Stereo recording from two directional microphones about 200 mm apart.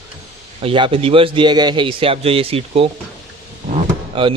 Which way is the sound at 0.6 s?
25° right (ahead or behind).